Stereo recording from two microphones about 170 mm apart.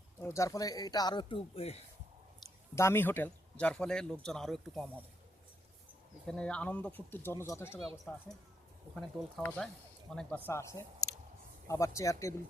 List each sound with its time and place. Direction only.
0.2 s speech: 15° left (ahead or behind); by 1.8 s 35° left (ahead or behind)
2.7 s speech: 15° left (ahead or behind)
6.2 s speech: 5° left (ahead or behind)
9.0 s speech: 5° left (ahead or behind)